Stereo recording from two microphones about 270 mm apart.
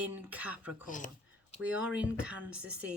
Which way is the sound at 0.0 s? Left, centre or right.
Centre.